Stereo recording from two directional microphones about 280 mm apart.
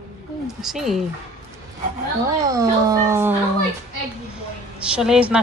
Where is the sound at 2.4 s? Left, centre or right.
Centre.